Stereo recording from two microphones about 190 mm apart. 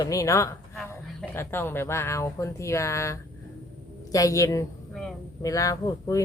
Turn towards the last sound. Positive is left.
turn(degrees=15)  # may be behind; listen again after turning